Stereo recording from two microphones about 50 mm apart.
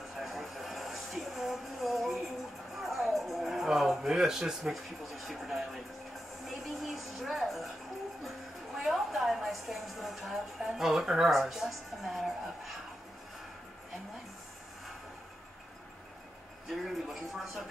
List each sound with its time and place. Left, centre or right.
0.2 s a sound: centre
2.7 s speech: centre
8.7 s a woman's voice: centre
16.6 s a woman's voice: centre